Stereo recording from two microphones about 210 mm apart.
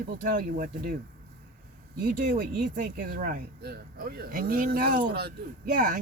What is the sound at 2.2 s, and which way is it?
Speech, 40° right (ahead or behind).